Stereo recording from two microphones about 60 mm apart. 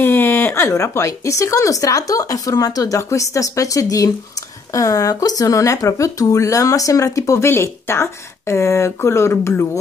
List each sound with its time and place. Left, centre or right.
0.0 s a sound: left
0.7 s speech: left
7.4 s speech: left